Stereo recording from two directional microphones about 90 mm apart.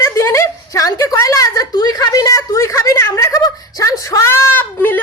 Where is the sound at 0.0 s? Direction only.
30° left (ahead or behind).